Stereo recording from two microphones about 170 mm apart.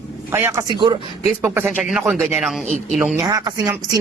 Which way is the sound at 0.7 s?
25° right (ahead or behind).